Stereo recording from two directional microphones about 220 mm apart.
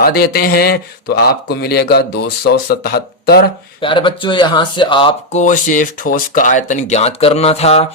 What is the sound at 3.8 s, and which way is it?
Speech, 20° left (ahead or behind).